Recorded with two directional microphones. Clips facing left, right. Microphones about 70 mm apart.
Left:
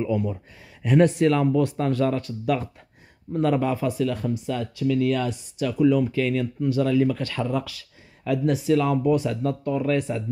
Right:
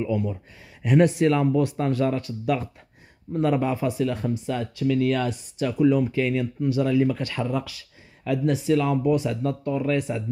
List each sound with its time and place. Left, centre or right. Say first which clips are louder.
0.0 s speech: left 1 dB; centre
0.8 s speech: left 1 dB; centre
4.0 s speech: even; right
4.7 s speech: even; right
5.6 s speech: even; right; by 10.2 s centre